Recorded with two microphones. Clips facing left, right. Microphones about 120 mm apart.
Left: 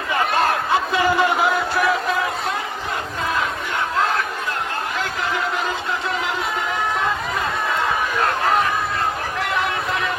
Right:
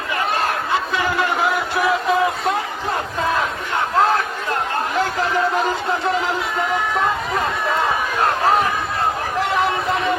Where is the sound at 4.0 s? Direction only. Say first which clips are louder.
Right 5 dB; 35° right (ahead or behind).